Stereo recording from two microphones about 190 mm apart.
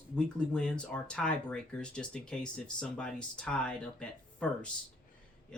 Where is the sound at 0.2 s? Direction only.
5° left (ahead or behind).